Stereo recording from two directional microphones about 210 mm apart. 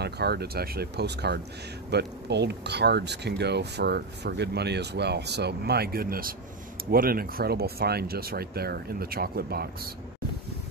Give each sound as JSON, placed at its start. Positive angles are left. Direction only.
{"t": 0.0, "sound": "speech", "side_deg": -50}